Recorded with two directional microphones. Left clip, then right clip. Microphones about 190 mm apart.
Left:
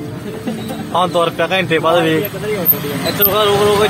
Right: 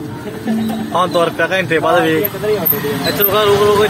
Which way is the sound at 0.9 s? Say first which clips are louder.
Even; 15° left (ahead or behind).